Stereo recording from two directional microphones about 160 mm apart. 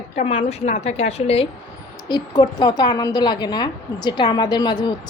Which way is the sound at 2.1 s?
25° left (ahead or behind).